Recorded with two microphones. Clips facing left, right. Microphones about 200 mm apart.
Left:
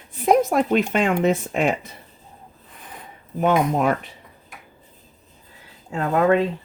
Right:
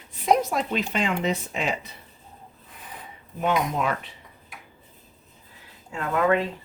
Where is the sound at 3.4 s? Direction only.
45° left (ahead or behind).